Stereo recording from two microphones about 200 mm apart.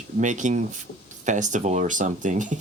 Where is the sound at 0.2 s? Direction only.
40° right (ahead or behind).